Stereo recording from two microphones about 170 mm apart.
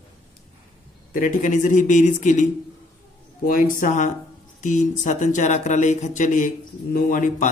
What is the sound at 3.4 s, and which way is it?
Speech, 55° left (ahead or behind).